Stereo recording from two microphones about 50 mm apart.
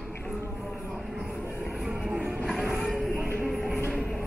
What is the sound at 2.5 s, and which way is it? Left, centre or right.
Music, centre.